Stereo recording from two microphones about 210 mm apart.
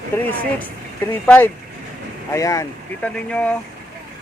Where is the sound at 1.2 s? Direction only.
10° left (ahead or behind).